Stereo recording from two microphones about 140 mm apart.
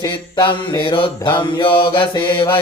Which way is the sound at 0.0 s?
35° left (ahead or behind).